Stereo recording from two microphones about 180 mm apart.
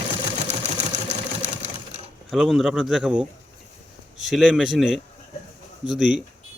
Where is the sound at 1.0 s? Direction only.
35° right (ahead or behind).